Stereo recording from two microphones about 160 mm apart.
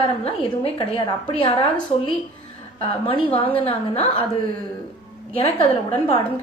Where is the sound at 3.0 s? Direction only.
35° left (ahead or behind).